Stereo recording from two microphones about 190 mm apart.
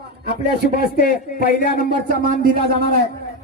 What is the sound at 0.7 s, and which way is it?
Speech, 55° left (ahead or behind).